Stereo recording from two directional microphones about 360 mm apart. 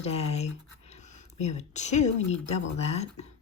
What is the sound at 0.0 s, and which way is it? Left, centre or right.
Speech, centre.